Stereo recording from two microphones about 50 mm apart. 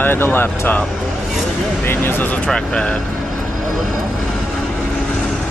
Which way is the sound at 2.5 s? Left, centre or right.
Left.